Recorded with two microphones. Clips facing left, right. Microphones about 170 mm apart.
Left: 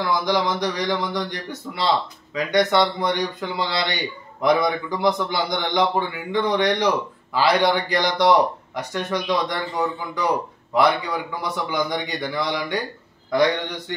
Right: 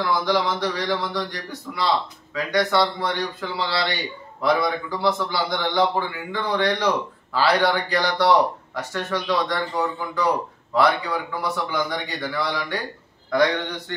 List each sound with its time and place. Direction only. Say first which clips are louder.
0.0 s a man's voice: even; 15° left (ahead or behind)